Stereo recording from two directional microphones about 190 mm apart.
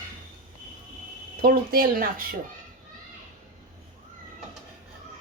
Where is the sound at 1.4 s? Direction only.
50° right (ahead or behind).